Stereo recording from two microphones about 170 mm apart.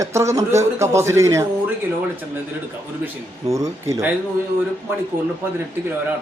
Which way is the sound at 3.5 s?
20° right (ahead or behind).